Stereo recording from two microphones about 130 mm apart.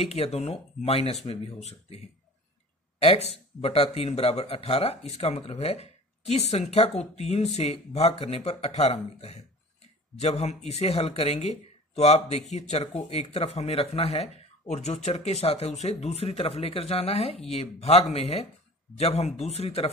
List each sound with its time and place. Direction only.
0.0 s speech: 50° left (ahead or behind)
3.0 s speech: 50° left (ahead or behind)